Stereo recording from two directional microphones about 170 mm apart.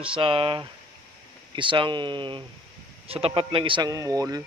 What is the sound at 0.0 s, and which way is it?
A man's voice, 30° right (ahead or behind).